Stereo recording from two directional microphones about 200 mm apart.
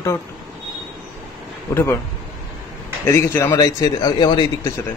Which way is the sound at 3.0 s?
15° left (ahead or behind).